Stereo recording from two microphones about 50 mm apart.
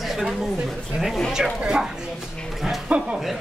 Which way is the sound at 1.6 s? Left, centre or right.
Centre.